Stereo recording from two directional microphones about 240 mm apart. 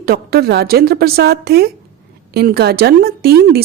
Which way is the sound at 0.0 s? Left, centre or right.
Right.